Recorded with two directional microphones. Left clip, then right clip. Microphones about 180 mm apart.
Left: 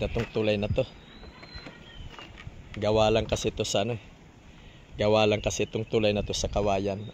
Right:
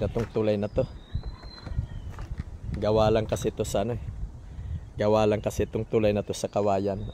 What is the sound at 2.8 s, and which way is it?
Speech, 10° right (ahead or behind).